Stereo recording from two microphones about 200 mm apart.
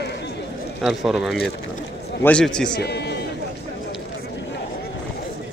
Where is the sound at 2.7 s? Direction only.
55° left (ahead or behind).